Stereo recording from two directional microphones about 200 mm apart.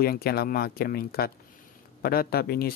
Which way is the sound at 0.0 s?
50° left (ahead or behind).